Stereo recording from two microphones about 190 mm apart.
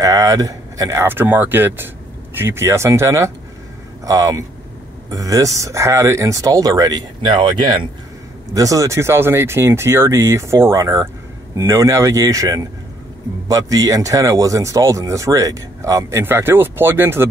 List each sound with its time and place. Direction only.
0.0 s speech: 20° right (ahead or behind)